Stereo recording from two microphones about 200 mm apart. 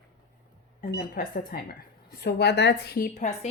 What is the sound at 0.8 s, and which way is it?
A woman's voice, 45° left (ahead or behind).